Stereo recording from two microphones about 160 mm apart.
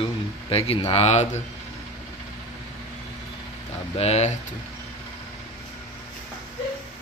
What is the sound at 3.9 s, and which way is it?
Speech, 40° left (ahead or behind).